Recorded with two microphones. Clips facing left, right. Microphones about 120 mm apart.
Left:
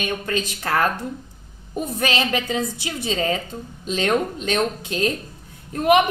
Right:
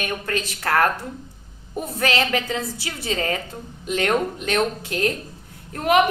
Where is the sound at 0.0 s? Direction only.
20° left (ahead or behind).